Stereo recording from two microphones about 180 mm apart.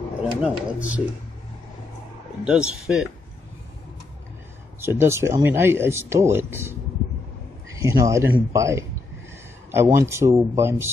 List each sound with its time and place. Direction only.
0.2 s speech: 5° right (ahead or behind)
2.4 s a man's voice: 5° right (ahead or behind)
4.8 s a man's voice: 15° right (ahead or behind)